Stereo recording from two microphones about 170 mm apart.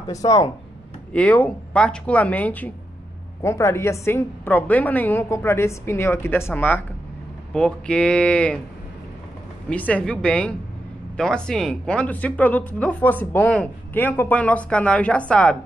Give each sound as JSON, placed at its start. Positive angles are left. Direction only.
{"t": 0.1, "sound": "speech", "side_deg": 20}
{"t": 1.1, "sound": "speech", "side_deg": 10}
{"t": 9.7, "sound": "speech", "side_deg": 10}